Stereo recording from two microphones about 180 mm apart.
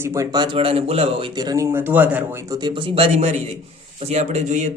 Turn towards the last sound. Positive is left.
turn(degrees=-40)  # may be behind; listen again after turning